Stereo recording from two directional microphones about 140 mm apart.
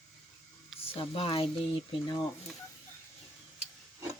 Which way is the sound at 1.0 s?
40° left (ahead or behind).